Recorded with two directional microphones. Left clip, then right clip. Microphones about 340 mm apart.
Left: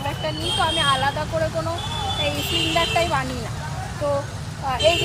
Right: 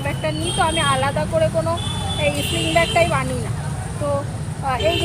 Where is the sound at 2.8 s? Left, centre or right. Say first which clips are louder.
Right 6 dB; centre.